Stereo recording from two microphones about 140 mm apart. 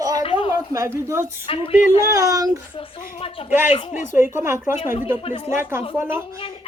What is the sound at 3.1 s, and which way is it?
Speech, 40° left (ahead or behind).